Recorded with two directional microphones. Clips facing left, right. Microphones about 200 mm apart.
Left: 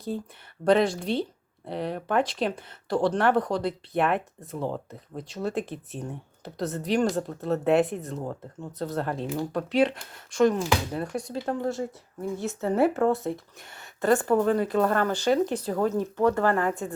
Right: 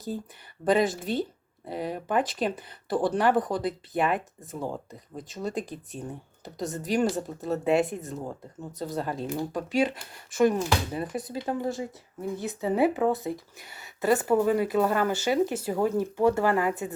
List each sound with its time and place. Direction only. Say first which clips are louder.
0.6 s speech: left 2 dB; centre (ahead or behind)